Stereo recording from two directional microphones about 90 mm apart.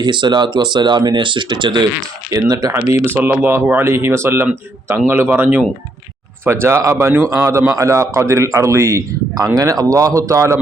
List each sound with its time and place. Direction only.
0.0 s speech: 60° right (ahead or behind)
2.3 s a man's voice: 40° right (ahead or behind); by 5.6 s 15° right (ahead or behind)
6.4 s a man's voice: 30° right (ahead or behind)